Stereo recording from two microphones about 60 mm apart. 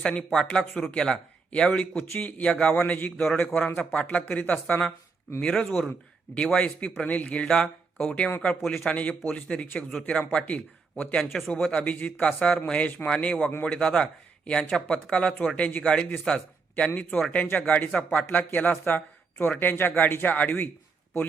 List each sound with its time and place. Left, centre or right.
0.0 s a man's voice: centre
2.7 s a man's voice: left; by 8.9 s centre
8.9 s speech: left
9.9 s a man's voice: centre
10.4 s speech: left
11.2 s speech: centre
11.4 s a man's voice: centre
14.6 s speech: centre
14.8 s a man's voice: centre